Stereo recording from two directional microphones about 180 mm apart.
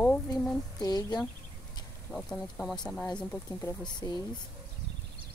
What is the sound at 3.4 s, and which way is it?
Speech, 20° left (ahead or behind).